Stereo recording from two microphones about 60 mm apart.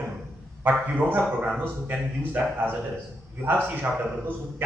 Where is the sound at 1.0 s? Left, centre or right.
Right.